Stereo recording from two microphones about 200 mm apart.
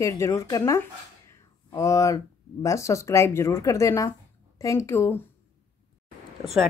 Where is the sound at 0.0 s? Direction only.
15° left (ahead or behind).